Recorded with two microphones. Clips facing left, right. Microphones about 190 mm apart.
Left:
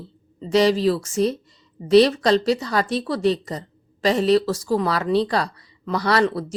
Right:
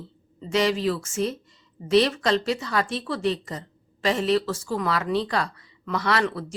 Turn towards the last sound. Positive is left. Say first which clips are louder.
# left 5 dB
turn(degrees=35)  # may be behind; listen again after turning